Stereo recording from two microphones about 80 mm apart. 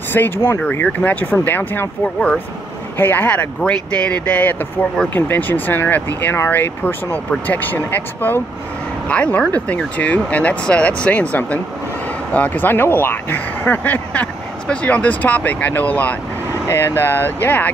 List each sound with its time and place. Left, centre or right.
0.2 s speech: left
0.6 s speech: centre
3.0 s speech: left
9.0 s speech: centre
16.6 s speech: left